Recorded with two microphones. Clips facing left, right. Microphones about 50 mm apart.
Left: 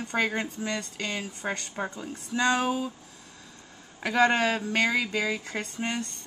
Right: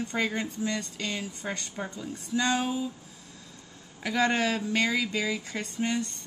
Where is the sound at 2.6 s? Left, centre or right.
Left.